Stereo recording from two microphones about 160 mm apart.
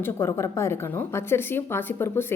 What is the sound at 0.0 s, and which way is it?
A woman's voice, 15° left (ahead or behind).